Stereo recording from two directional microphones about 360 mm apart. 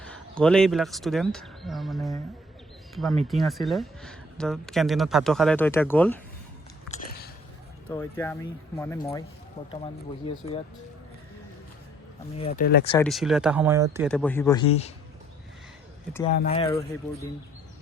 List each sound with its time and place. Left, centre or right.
0.0 s speech: centre
6.9 s a sound: left
7.9 s speech: centre
12.4 s speech: centre
13.1 s speech: centre
16.3 s speech: centre